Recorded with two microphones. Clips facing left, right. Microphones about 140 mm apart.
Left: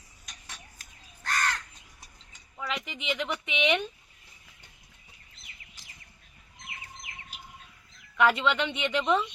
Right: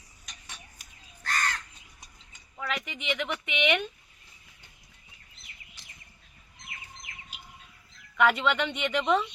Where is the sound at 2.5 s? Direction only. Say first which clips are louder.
Right 1 dB; centre (ahead or behind).